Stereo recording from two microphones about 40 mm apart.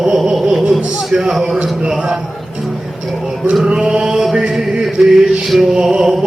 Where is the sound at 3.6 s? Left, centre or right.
Right.